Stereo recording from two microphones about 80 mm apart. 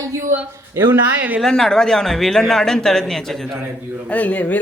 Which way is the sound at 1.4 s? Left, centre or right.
Centre.